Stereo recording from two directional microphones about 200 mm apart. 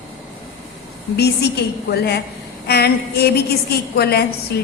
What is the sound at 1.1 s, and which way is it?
A woman's voice, 55° left (ahead or behind).